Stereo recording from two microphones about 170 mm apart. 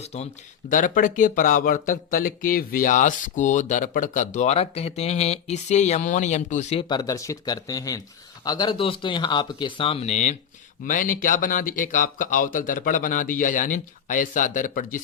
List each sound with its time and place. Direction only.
0.0 s speech: 40° left (ahead or behind)
0.7 s speech: 50° left (ahead or behind)
6.8 s speech: 25° left (ahead or behind); by 10.3 s 40° left (ahead or behind)
10.8 s speech: 50° left (ahead or behind)